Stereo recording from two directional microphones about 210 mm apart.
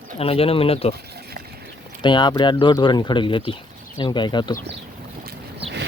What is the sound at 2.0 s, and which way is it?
Speech, 20° left (ahead or behind).